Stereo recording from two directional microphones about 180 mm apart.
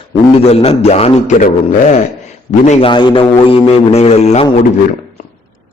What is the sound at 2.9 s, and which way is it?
Speech, 25° left (ahead or behind).